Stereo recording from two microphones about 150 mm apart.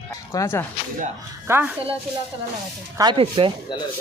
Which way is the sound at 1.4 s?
15° right (ahead or behind).